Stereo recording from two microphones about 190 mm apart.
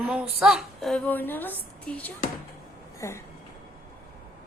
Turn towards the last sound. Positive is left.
turn(degrees=15)  # may be behind; listen again after turning